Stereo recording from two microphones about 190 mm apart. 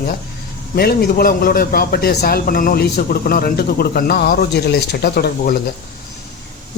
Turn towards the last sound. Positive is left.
turn(degrees=50)  # may be behind; listen again after turning